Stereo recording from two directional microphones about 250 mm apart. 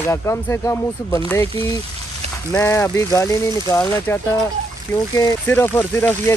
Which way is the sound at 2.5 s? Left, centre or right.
Centre.